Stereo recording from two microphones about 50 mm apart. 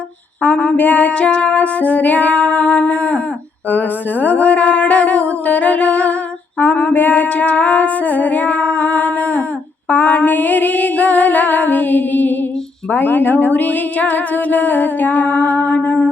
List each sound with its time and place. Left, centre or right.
0.4 s speech: left
1.2 s music: left
5.5 s humming: left
6.6 s music: left
9.9 s speech: left